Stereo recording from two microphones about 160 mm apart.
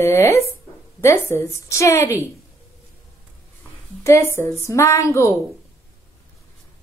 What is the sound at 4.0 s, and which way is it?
A woman's voice, 15° left (ahead or behind).